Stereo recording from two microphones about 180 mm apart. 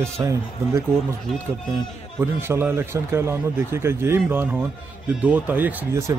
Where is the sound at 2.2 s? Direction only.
15° right (ahead or behind).